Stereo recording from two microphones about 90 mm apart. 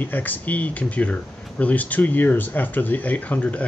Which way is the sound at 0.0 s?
20° left (ahead or behind).